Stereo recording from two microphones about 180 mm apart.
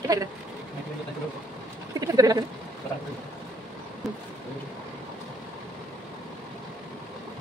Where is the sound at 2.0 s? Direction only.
20° right (ahead or behind).